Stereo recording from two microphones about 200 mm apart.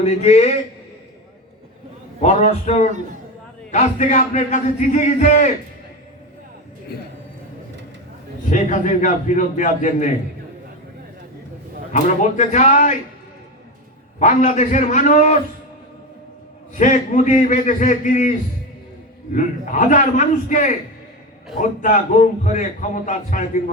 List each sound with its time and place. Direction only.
0.0 s a man's voice: 35° left (ahead or behind)
2.2 s a man's voice: 35° left (ahead or behind)
6.9 s a man's voice: 55° left (ahead or behind)
8.4 s a man's voice: 40° left (ahead or behind)
11.9 s a man's voice: 40° left (ahead or behind)
14.2 s a man's voice: 35° left (ahead or behind)
16.7 s a man's voice: 40° left (ahead or behind)